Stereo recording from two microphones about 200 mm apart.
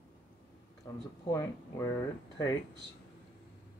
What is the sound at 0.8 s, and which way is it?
Speech, 15° left (ahead or behind).